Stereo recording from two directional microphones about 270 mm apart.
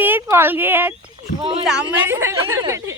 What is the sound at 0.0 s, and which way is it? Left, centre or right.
Speech, centre.